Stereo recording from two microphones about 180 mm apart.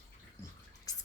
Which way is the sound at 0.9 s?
20° left (ahead or behind).